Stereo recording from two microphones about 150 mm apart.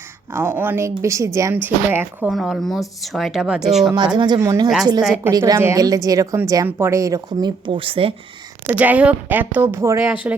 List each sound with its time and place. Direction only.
0.3 s a woman's voice: 15° right (ahead or behind)
2.3 s speech: centre (ahead or behind)
4.2 s speech: 25° right (ahead or behind)
8.6 s a woman's voice: 10° right (ahead or behind)